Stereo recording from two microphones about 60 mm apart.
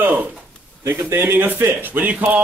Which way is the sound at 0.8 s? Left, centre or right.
Right.